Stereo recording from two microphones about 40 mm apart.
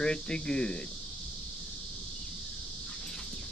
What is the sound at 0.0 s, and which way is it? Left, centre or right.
Speech, left.